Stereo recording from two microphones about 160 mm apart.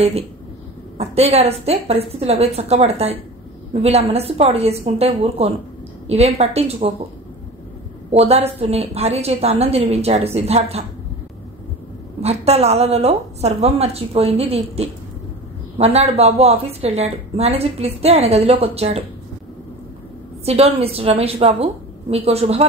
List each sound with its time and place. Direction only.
0.9 s a woman's voice: 40° right (ahead or behind)
8.1 s a woman's voice: 40° right (ahead or behind)
12.2 s a woman's voice: 40° right (ahead or behind)
20.4 s a woman's voice: 40° right (ahead or behind)